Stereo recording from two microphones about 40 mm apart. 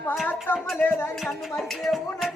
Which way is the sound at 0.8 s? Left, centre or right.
Left.